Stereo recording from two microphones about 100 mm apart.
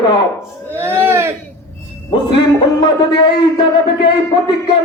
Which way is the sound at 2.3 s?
55° left (ahead or behind).